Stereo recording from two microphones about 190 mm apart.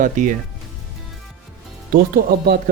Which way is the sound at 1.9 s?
50° right (ahead or behind).